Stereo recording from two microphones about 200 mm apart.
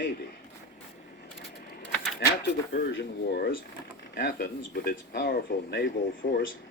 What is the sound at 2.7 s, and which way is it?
Speech, 60° left (ahead or behind).